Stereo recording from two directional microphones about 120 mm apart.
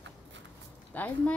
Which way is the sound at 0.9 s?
15° left (ahead or behind).